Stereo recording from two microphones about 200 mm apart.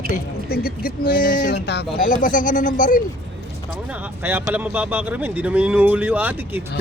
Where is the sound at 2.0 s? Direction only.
40° left (ahead or behind).